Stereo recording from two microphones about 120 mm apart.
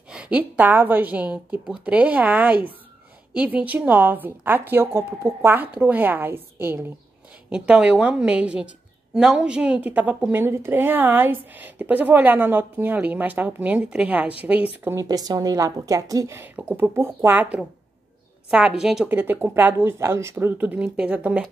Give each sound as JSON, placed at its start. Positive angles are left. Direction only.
{"t": 0.1, "sound": "a woman's voice", "side_deg": -10}
{"t": 15.0, "sound": "a woman's voice", "side_deg": -30}
{"t": 19.0, "sound": "a woman's voice", "side_deg": -15}